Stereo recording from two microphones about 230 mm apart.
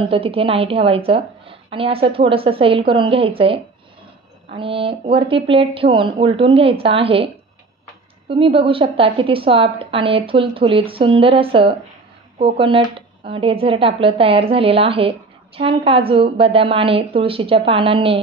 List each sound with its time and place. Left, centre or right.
0.0 s speech: right
8.3 s speech: right